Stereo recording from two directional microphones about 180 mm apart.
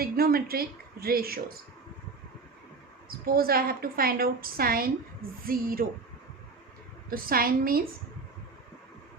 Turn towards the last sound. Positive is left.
turn(degrees=-55)  # may be behind; listen again after turning